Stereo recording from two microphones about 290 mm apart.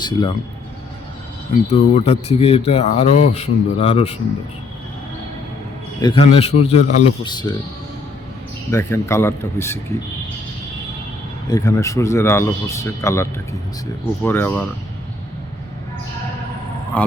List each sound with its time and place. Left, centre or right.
0.0 s speech: centre
1.7 s speech: left
6.0 s a man's voice: centre
8.7 s speech: centre
11.4 s speech: centre
14.3 s speech: centre
16.9 s speech: centre